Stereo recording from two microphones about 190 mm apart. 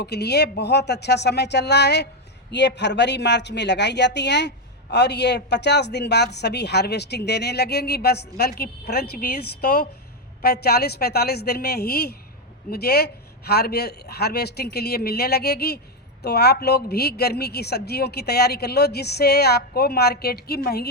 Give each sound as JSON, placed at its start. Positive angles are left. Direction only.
{"t": 0.0, "sound": "speech", "side_deg": 60}